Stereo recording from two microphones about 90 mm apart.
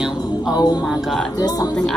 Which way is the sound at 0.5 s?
50° left (ahead or behind).